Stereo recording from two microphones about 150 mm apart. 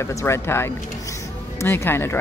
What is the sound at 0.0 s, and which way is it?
A woman's voice, 20° left (ahead or behind).